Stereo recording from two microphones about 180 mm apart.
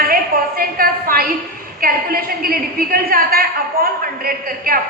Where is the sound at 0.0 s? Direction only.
55° right (ahead or behind).